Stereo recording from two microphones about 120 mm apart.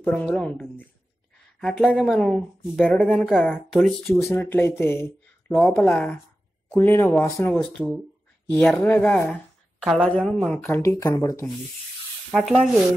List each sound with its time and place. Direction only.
0.0 s speech: 10° left (ahead or behind); by 2.1 s 5° right (ahead or behind)
2.1 s speech: 5° left (ahead or behind)
4.3 s a woman's voice: 15° left (ahead or behind)
10.7 s speech: 25° left (ahead or behind)
12.3 s speech: centre (ahead or behind)